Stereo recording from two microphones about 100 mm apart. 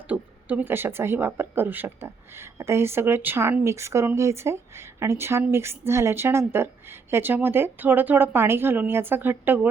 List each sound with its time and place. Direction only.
0.1 s speech: 15° right (ahead or behind)